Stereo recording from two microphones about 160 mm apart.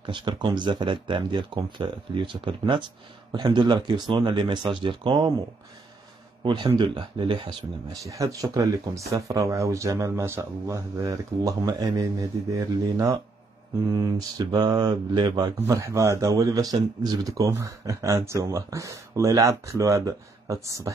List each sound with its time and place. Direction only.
0.0 s speech: 30° right (ahead or behind)
6.4 s speech: 30° right (ahead or behind)